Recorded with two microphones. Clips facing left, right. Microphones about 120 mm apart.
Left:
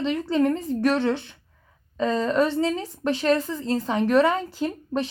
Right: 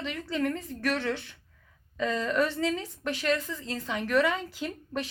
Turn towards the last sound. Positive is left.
turn(degrees=35)  # may be behind; listen again after turning